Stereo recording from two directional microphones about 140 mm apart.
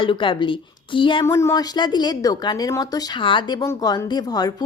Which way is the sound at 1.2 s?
20° left (ahead or behind).